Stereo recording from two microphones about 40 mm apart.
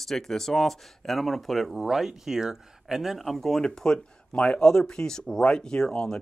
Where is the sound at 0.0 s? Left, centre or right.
Centre.